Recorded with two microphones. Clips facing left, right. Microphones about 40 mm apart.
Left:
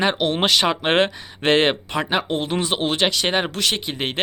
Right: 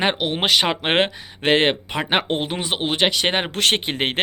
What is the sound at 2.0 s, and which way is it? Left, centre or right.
Speech, right.